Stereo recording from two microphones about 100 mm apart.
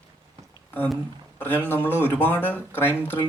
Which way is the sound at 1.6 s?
20° left (ahead or behind).